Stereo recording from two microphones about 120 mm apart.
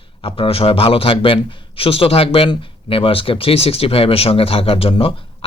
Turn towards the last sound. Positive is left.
turn(degrees=50)  # may be behind; listen again after turning